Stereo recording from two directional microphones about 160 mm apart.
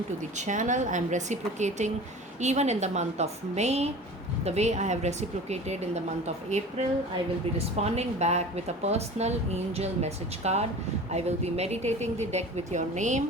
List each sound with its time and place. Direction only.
0.3 s a woman's voice: 50° right (ahead or behind)
7.8 s a woman's voice: 40° right (ahead or behind)